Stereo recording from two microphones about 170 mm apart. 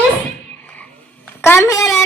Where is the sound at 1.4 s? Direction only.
15° left (ahead or behind).